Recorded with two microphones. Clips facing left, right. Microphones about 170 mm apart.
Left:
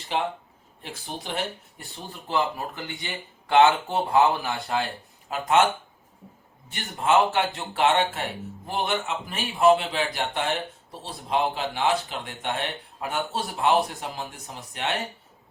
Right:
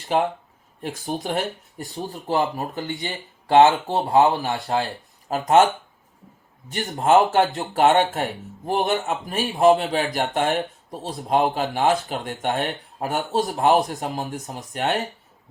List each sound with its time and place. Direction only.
0.1 s speech: 45° right (ahead or behind)
6.8 s speech: 40° right (ahead or behind)